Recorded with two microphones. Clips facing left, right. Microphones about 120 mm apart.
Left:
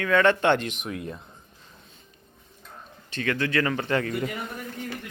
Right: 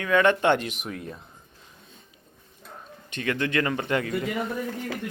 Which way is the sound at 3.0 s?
15° right (ahead or behind).